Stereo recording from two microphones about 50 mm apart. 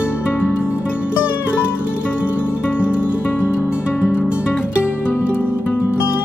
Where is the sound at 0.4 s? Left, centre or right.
Left.